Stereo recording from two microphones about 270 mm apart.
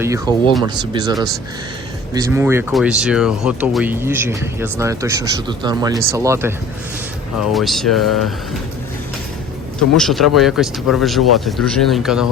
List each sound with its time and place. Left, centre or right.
0.0 s speech: centre
2.1 s speech: centre
7.4 s speech: centre
10.0 s speech: centre